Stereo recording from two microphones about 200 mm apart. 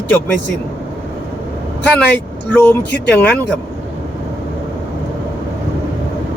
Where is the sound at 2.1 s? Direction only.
10° left (ahead or behind).